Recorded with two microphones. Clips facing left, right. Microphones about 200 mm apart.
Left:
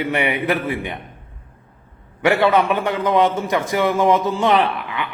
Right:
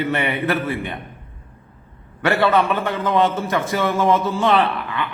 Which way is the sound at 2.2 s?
15° left (ahead or behind).